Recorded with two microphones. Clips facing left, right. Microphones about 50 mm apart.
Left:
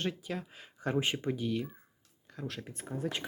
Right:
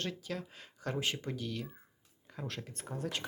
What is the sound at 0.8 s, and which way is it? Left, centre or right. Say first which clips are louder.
Speech: left 4 dB; left.